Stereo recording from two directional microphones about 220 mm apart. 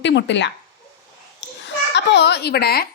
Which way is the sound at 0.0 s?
55° left (ahead or behind).